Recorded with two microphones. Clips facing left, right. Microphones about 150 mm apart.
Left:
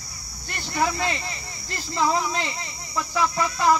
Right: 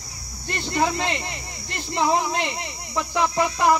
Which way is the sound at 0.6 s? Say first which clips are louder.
Right 2 dB; 20° right (ahead or behind).